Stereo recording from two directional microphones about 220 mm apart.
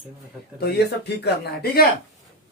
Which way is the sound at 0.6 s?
45° left (ahead or behind).